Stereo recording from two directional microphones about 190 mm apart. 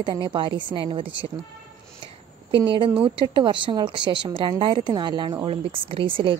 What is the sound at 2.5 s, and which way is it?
A woman's voice, 25° right (ahead or behind).